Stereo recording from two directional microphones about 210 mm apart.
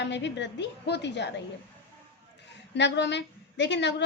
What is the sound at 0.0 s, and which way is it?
A woman's voice, 55° left (ahead or behind).